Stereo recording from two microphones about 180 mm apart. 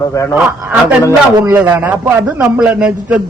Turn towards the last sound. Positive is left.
turn(degrees=-5)  # may be behind; listen again after turning